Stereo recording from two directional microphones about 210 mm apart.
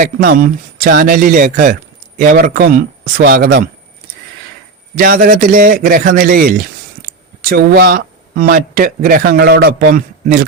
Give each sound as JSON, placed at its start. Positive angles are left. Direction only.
{"t": 0.0, "sound": "a man's voice", "side_deg": -40}
{"t": 4.9, "sound": "speech", "side_deg": -45}